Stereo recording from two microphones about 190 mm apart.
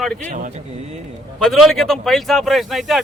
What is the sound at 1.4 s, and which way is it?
Speech, centre (ahead or behind).